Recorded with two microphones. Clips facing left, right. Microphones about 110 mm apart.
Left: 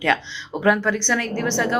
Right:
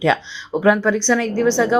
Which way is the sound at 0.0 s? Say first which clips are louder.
Right 4 dB; 10° right (ahead or behind).